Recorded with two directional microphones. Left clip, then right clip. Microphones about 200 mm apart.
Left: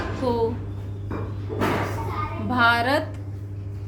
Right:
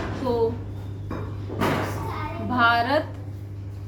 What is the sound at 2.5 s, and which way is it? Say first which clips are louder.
Speech: left 1 dB; 20° left (ahead or behind).